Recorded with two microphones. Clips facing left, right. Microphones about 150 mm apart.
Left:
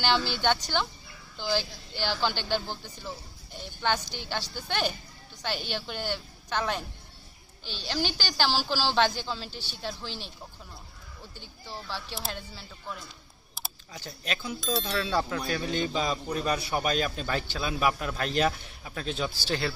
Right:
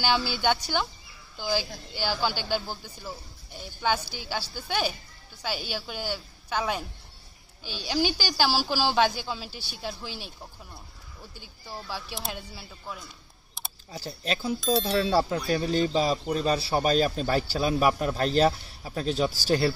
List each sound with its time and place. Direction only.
0.4 s a woman's voice: 10° right (ahead or behind)
11.3 s a woman's voice: 10° right (ahead or behind)
13.6 s camera: centre (ahead or behind)
13.9 s speech: 35° right (ahead or behind)
14.6 s speech: centre (ahead or behind)
14.9 s speech: 35° right (ahead or behind)